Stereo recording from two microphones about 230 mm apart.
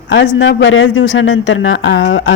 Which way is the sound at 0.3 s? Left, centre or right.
Left.